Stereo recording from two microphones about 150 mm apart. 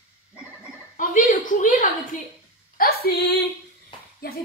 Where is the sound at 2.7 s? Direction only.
85° left.